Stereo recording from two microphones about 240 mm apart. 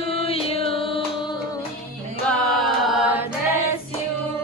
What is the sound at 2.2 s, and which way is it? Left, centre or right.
Music, centre.